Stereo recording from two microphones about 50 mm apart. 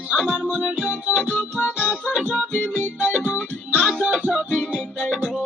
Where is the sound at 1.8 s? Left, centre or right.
Right.